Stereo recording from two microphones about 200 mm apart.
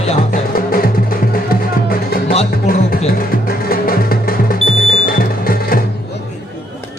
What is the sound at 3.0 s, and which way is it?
Music, 45° left (ahead or behind).